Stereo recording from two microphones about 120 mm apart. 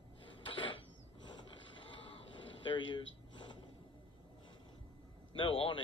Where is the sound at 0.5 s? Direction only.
45° left (ahead or behind).